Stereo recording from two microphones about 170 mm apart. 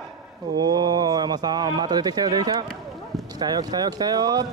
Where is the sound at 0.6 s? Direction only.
25° right (ahead or behind).